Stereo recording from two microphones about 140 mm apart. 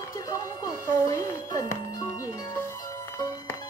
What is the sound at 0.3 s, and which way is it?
Music, 25° left (ahead or behind).